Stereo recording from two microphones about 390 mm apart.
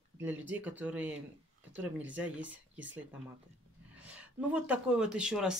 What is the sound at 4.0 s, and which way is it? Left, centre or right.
Speech, centre.